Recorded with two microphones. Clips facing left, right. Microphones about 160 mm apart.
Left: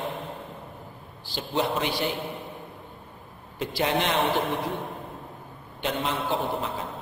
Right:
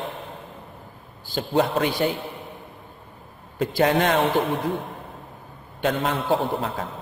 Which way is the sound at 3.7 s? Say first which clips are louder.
Right 6 dB; 50° right (ahead or behind).